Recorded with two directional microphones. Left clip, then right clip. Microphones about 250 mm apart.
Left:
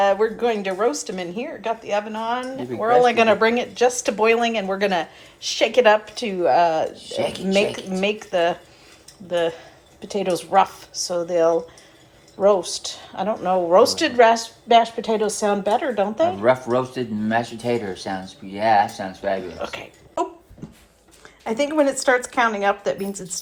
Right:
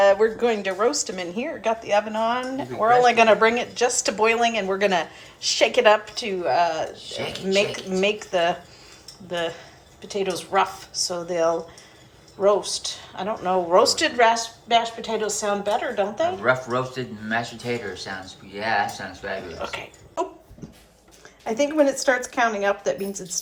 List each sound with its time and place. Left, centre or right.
0.0 s a woman's voice: centre
6.9 s speech: centre
7.4 s a woman's voice: centre
16.4 s speech: left
19.5 s speech: centre
21.4 s a woman's voice: centre